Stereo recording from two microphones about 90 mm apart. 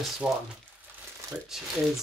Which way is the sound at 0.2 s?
5° right (ahead or behind).